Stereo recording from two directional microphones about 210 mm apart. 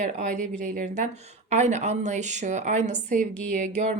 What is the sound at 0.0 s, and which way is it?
A woman's voice, 35° right (ahead or behind).